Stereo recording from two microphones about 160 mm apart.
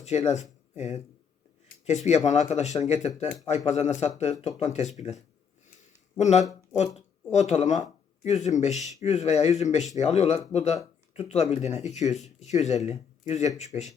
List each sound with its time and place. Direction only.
0.0 s speech: 45° left (ahead or behind)
6.1 s speech: 45° left (ahead or behind)